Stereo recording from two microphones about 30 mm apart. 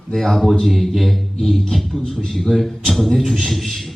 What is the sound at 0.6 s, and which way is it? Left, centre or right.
Speech, centre.